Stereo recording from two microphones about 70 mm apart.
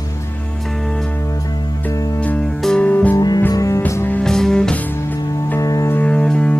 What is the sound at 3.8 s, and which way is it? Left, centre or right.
Music, left.